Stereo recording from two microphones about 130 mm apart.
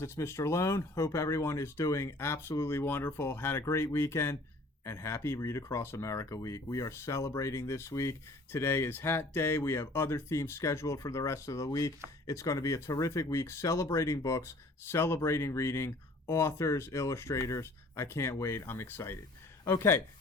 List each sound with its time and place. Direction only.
0.0 s speech: 20° left (ahead or behind)